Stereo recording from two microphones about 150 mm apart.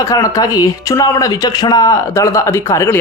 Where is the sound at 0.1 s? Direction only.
25° left (ahead or behind).